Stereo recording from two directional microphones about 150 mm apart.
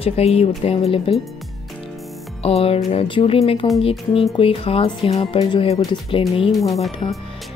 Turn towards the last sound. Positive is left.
turn(degrees=35)  # may be behind; listen again after turning